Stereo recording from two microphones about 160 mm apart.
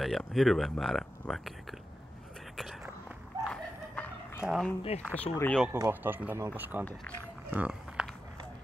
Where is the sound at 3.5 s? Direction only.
10° left (ahead or behind).